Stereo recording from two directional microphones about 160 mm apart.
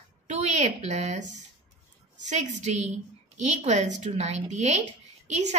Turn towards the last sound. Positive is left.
turn(degrees=-45)  # may be behind; listen again after turning